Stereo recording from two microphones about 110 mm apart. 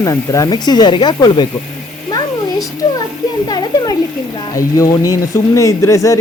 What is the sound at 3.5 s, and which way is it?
Speech, 35° left (ahead or behind).